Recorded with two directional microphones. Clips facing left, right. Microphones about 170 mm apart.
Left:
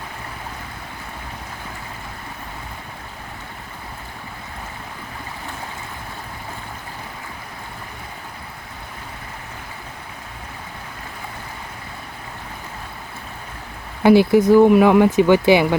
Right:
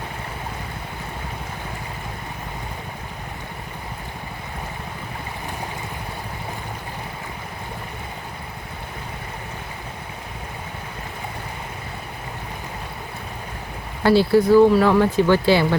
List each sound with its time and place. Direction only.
14.0 s speech: 15° left (ahead or behind)